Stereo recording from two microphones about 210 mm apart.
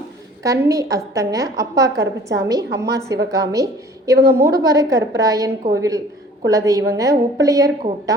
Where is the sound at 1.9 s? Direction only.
50° right (ahead or behind).